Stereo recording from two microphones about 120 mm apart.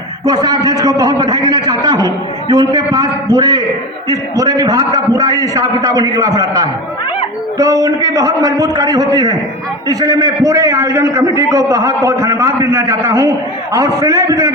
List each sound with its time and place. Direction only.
0.3 s a man's voice: 35° right (ahead or behind)